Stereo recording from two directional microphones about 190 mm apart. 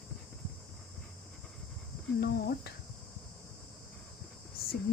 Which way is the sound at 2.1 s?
55° left (ahead or behind).